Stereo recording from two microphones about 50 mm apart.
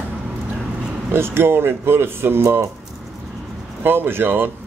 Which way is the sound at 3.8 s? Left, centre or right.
Right.